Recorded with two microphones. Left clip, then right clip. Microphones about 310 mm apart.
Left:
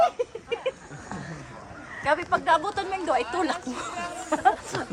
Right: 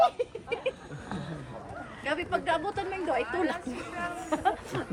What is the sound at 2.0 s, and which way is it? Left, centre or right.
Speech, centre.